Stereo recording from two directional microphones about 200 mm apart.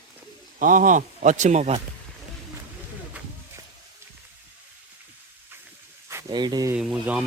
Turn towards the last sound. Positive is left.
turn(degrees=-5)  # may be behind; listen again after turning